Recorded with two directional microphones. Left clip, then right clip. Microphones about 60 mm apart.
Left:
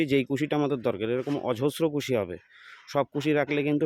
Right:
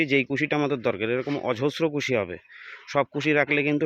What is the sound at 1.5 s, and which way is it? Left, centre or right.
Speech, centre.